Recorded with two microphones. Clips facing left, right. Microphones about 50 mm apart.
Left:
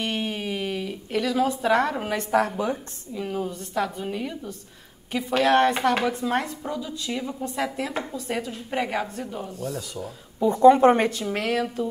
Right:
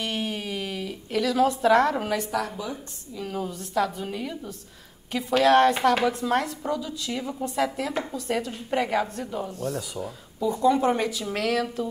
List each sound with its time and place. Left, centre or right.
0.0 s a sound: centre
2.3 s speech: left
3.2 s a woman's voice: centre
6.6 s a woman's voice: centre
10.4 s speech: left
11.2 s a woman's voice: centre